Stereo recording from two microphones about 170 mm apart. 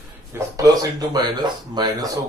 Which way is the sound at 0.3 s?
20° right (ahead or behind).